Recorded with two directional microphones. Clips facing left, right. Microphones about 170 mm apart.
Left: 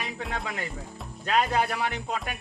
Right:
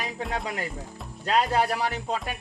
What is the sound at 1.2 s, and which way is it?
Speech, 35° right (ahead or behind).